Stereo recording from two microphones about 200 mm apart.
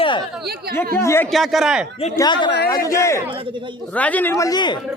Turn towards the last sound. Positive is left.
turn(degrees=20)  # may be behind; listen again after turning